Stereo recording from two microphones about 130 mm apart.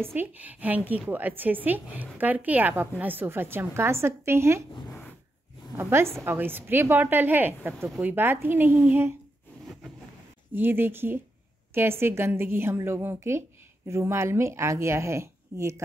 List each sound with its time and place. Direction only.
0.0 s a woman's voice: 15° right (ahead or behind)
5.8 s a woman's voice: 20° right (ahead or behind)
10.5 s a woman's voice: 15° right (ahead or behind)